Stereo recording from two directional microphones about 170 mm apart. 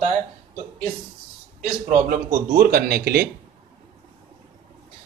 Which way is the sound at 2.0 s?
60° right (ahead or behind).